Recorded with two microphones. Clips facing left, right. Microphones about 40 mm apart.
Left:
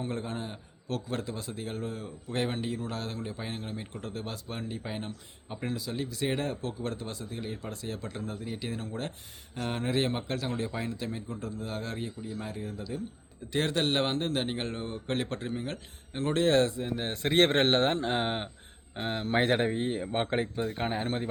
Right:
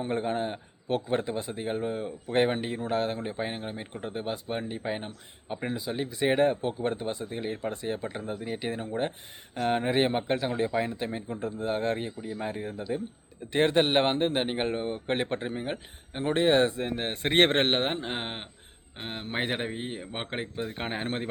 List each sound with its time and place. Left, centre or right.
0.0 s speech: right
16.7 s speech: right; by 20.7 s centre
20.7 s speech: right